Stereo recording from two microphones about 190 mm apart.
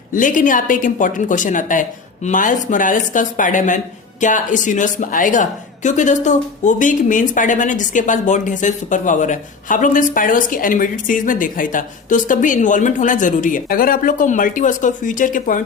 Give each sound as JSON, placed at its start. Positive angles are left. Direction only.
{"t": 0.1, "sound": "a woman's voice", "side_deg": 45}